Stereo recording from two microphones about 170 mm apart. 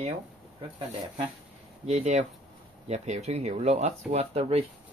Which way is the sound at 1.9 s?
40° right (ahead or behind).